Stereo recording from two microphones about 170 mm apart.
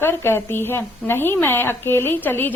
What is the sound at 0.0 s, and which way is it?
Speech, 15° left (ahead or behind).